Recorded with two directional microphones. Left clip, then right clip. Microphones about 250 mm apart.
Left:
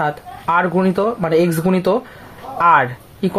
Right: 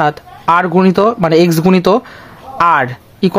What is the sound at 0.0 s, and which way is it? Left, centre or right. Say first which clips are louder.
Speech: right 6 dB; right.